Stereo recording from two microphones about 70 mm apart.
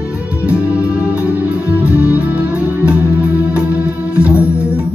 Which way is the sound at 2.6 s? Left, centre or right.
Right.